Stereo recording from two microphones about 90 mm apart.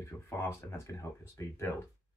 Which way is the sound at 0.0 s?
30° left (ahead or behind).